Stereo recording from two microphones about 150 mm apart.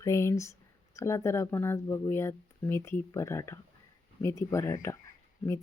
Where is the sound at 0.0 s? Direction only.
20° left (ahead or behind).